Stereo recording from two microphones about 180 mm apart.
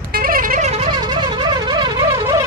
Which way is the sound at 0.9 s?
25° right (ahead or behind).